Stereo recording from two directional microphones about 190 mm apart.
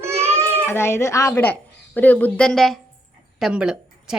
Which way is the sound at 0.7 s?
15° left (ahead or behind).